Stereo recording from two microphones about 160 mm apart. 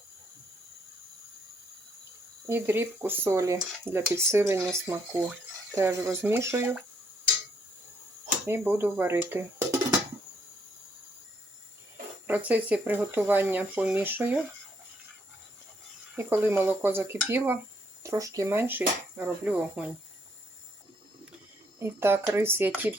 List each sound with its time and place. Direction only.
2.5 s speech: 15° right (ahead or behind)
8.4 s speech: 15° right (ahead or behind)
12.3 s speech: 10° right (ahead or behind)
16.1 s speech: 15° right (ahead or behind)
21.8 s speech: 15° right (ahead or behind)